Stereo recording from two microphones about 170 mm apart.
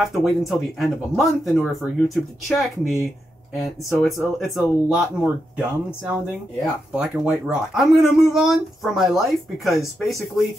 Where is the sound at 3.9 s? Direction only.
Centre (ahead or behind).